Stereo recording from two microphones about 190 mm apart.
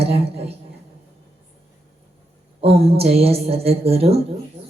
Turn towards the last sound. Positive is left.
turn(degrees=-30)  # may be behind; listen again after turning